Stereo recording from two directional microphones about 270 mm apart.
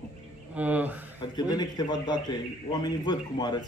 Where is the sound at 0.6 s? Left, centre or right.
Centre.